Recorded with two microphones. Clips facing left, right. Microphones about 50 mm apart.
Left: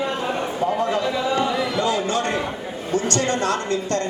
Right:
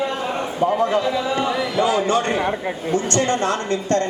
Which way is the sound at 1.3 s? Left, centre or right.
Centre.